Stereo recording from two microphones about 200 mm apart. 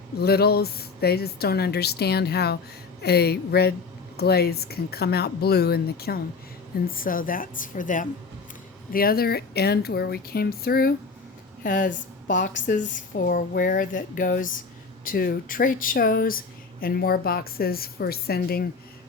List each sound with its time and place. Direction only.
0.2 s a woman's voice: 50° left (ahead or behind)